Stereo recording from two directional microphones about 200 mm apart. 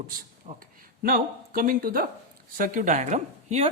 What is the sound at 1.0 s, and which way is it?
Speech, 45° right (ahead or behind).